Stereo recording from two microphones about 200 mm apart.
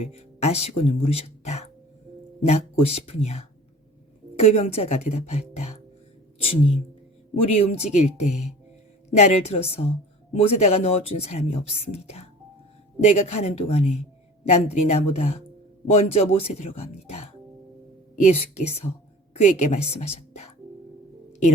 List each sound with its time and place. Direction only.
0.0 s a woman's voice: 30° left (ahead or behind)
18.3 s speech: 30° left (ahead or behind)